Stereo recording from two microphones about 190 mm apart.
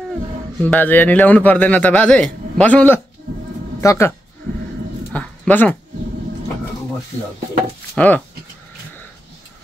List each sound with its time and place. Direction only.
0.6 s a man's voice: 10° left (ahead or behind)
5.1 s speech: 5° left (ahead or behind)
7.9 s speech: 5° left (ahead or behind)